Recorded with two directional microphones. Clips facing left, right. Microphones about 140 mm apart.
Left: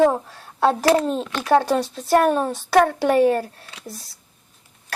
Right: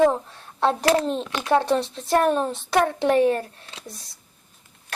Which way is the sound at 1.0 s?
5° left (ahead or behind).